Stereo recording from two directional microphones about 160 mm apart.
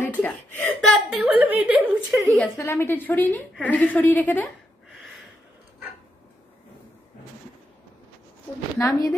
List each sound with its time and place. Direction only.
0.5 s speech: 10° left (ahead or behind)
0.7 s a woman's voice: centre (ahead or behind)
2.2 s a woman's voice: 10° left (ahead or behind)
8.7 s a woman's voice: 20° left (ahead or behind)